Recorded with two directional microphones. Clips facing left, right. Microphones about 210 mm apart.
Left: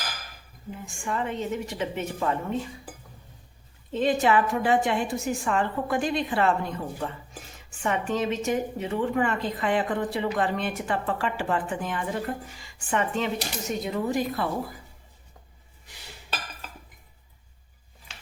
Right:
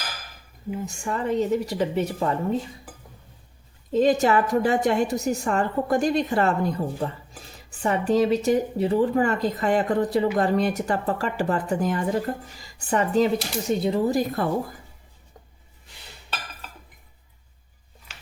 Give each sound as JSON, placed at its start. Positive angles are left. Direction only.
{"t": 0.9, "sound": "a woman's voice", "side_deg": -40}
{"t": 3.9, "sound": "a woman's voice", "side_deg": -40}